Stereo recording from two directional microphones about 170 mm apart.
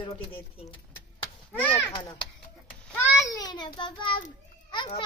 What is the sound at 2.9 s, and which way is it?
A child's voice, 15° left (ahead or behind).